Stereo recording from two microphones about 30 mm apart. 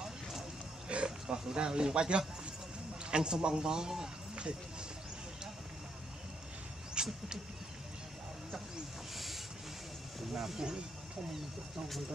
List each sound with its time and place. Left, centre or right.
0.8 s pig: right
1.3 s a man's voice: right
7.0 s vehicle: right
9.1 s hiss: centre
10.3 s speech: centre